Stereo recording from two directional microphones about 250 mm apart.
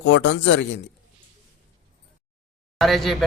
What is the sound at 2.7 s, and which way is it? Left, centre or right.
Speech, centre.